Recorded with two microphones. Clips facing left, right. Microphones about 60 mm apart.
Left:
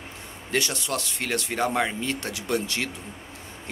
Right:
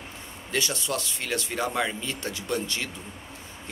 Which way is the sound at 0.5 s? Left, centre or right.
Left.